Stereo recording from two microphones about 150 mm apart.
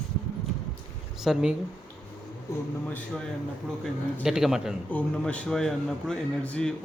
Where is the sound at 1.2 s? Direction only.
Centre (ahead or behind).